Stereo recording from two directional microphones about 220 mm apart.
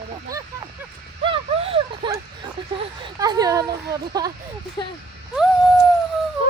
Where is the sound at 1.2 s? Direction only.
25° right (ahead or behind).